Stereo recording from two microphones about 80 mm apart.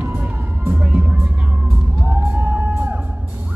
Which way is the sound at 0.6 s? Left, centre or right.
Centre.